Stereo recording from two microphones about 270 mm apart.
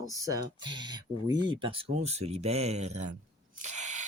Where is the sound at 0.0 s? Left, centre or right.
Centre.